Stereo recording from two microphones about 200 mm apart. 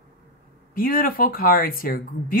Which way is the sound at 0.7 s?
45° left (ahead or behind).